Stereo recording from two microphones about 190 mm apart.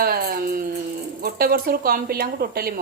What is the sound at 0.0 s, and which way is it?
Music, 55° right (ahead or behind).